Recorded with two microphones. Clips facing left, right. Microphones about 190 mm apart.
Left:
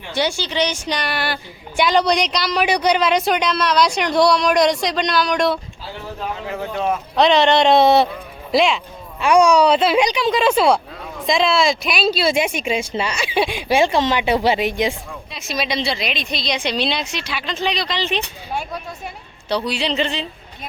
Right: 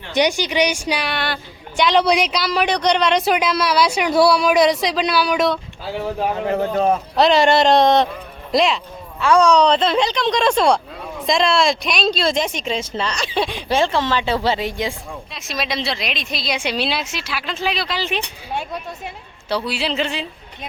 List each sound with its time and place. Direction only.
0.1 s a woman's voice: 15° right (ahead or behind)
6.5 s speech: 45° right (ahead or behind)
7.2 s a woman's voice: 5° right (ahead or behind)
9.2 s speech: 15° left (ahead or behind)
15.3 s a woman's voice: centre (ahead or behind)
19.5 s a woman's voice: 5° right (ahead or behind)